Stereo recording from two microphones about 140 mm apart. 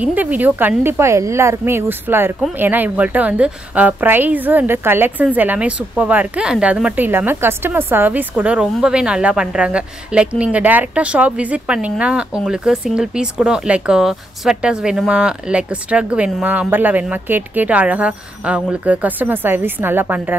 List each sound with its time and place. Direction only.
0.0 s a woman's voice: 10° right (ahead or behind)